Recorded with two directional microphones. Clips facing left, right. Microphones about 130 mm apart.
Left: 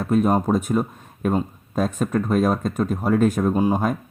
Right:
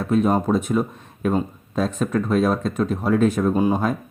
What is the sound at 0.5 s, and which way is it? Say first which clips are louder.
Speech: even; 45° left (ahead or behind).